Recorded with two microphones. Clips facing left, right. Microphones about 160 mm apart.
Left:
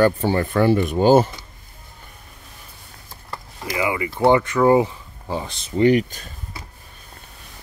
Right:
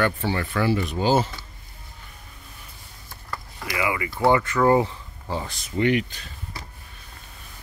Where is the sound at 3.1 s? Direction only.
25° left (ahead or behind).